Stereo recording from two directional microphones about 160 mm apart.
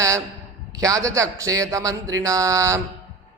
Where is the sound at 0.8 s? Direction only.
20° right (ahead or behind).